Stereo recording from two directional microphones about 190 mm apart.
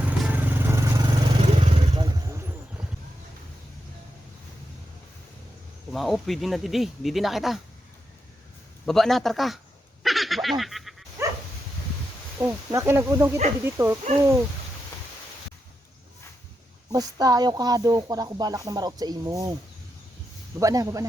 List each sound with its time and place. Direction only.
0.0 s vehicle: 10° right (ahead or behind)
5.9 s speech: centre (ahead or behind)
8.9 s speech: centre (ahead or behind)
10.0 s a sound: centre (ahead or behind)
11.2 s dog: 15° right (ahead or behind)
12.4 s speech: 15° right (ahead or behind)
16.9 s speech: 20° right (ahead or behind)
20.6 s speech: 20° right (ahead or behind)